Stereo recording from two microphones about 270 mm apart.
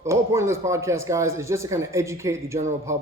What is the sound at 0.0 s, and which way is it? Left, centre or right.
Speech, centre.